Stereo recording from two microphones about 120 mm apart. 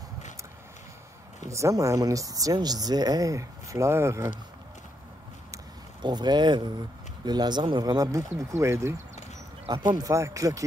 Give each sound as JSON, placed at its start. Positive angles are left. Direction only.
{"t": 1.5, "sound": "speech", "side_deg": -25}
{"t": 6.0, "sound": "speech", "side_deg": -35}